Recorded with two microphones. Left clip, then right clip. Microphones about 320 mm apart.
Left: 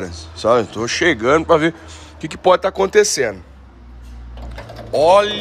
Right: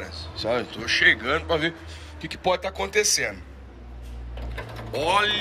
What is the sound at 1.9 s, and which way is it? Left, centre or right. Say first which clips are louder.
Speech: left 6 dB; left.